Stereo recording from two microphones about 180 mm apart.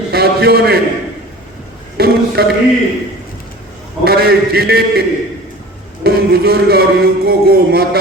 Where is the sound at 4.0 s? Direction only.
60° right (ahead or behind).